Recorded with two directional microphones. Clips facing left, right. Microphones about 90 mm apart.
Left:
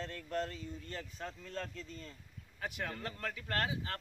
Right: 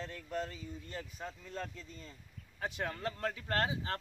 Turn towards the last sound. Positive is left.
turn(degrees=-30)  # may be behind; listen again after turning